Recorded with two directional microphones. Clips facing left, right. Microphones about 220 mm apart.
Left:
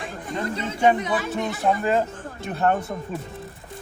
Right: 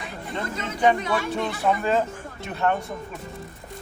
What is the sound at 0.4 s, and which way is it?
Speech, 30° left (ahead or behind).